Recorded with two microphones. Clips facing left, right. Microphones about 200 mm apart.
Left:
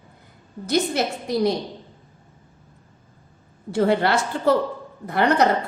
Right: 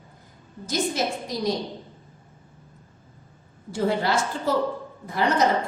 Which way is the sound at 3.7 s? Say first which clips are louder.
Left 4 dB; 65° left (ahead or behind).